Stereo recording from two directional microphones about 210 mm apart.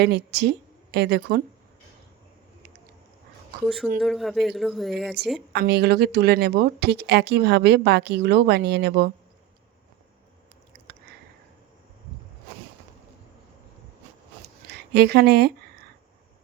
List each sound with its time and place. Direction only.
0.0 s speech: 50° right (ahead or behind)
3.9 s speech: centre (ahead or behind)
5.5 s speech: 50° right (ahead or behind)
14.7 s speech: 50° right (ahead or behind)